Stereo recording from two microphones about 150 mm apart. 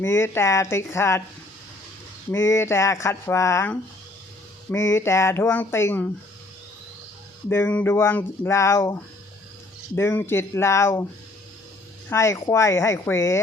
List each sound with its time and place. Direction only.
0.0 s speech: 15° left (ahead or behind)
2.3 s speech: 20° left (ahead or behind)
7.5 s speech: 15° left (ahead or behind)
12.0 s speech: 20° left (ahead or behind)